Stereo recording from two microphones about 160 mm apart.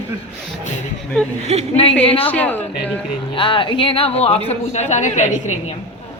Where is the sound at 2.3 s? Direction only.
10° left (ahead or behind).